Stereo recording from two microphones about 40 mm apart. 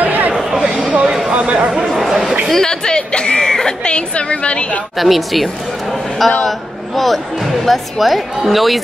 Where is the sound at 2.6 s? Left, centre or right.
Centre.